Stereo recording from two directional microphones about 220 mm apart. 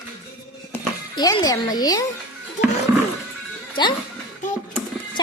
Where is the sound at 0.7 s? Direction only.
15° left (ahead or behind).